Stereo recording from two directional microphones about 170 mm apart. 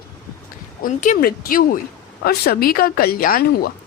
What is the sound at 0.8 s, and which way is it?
Speech, 50° left (ahead or behind).